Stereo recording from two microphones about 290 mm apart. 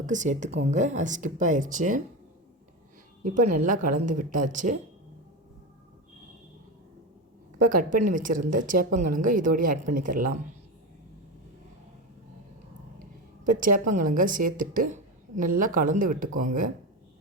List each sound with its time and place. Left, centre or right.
0.0 s speech: right
3.3 s speech: right
4.0 s speech: right
7.6 s speech: right
7.9 s speech: right
8.1 s speech: right
13.4 s speech: right
14.6 s speech: right
14.8 s a woman's voice: right
15.8 s speech: right